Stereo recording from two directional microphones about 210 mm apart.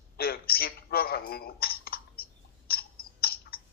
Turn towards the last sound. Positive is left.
turn(degrees=45)  # may be behind; listen again after turning